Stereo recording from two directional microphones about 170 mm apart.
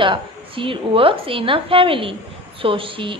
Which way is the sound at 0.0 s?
30° right (ahead or behind).